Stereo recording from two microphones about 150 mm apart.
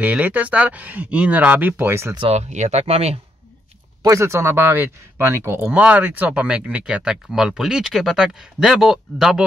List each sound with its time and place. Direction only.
0.0 s speech: 10° right (ahead or behind)
2.1 s speech: 45° right (ahead or behind)
4.0 s speech: 20° right (ahead or behind); by 9.4 s 5° right (ahead or behind)